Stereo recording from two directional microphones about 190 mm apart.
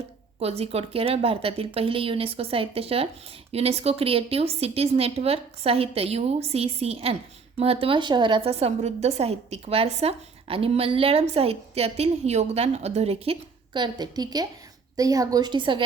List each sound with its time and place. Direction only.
0.3 s a woman's voice: 30° right (ahead or behind)